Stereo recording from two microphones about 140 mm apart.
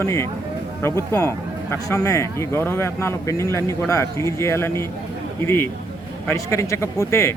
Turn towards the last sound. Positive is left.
turn(degrees=20)  # may be behind; listen again after turning